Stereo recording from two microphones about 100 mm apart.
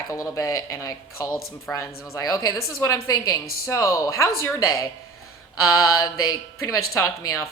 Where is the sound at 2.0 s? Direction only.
35° left (ahead or behind).